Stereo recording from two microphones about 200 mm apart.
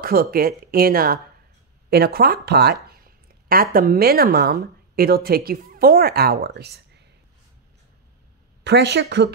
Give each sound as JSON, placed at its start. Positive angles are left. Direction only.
{"t": 0.0, "sound": "a woman's voice", "side_deg": -50}
{"t": 8.6, "sound": "speech", "side_deg": -60}